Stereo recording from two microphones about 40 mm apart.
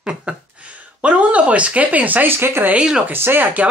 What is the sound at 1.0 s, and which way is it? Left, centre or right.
Speech, right.